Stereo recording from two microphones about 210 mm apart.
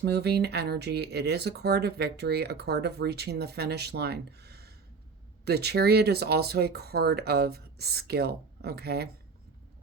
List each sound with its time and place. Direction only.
0.0 s speech: 50° right (ahead or behind)